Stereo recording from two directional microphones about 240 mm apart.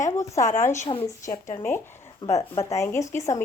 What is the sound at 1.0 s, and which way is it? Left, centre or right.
Speech, centre.